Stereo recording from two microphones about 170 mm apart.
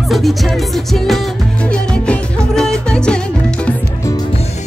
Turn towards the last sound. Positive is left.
turn(degrees=5)  # may be behind; listen again after turning